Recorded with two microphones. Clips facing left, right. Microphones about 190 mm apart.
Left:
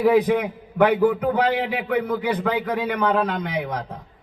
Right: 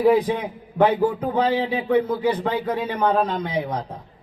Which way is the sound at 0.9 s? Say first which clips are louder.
Left 4 dB; 30° right (ahead or behind).